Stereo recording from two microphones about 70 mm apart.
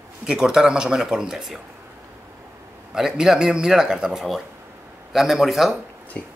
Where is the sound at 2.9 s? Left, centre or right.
Centre.